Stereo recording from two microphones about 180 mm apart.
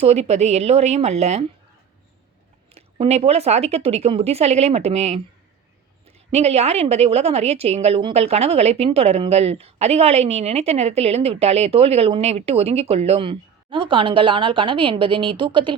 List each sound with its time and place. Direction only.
0.0 s a woman's voice: 35° right (ahead or behind)
2.7 s a woman's voice: 35° right (ahead or behind)